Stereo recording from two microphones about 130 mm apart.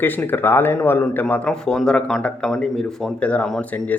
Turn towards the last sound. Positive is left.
turn(degrees=10)  # may be behind; listen again after turning